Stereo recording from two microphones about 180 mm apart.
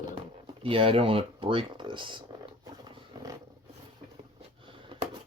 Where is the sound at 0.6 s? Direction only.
30° right (ahead or behind).